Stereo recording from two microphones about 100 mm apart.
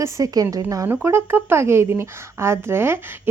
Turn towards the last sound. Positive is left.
turn(degrees=-20)  # may be behind; listen again after turning